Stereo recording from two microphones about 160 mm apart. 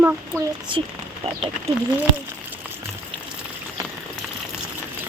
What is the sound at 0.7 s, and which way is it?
Speech, 30° right (ahead or behind).